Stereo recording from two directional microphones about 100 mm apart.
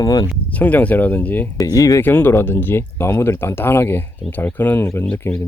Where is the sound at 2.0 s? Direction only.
20° left (ahead or behind).